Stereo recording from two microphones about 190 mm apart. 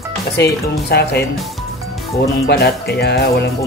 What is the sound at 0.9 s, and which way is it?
Speech, 60° left (ahead or behind).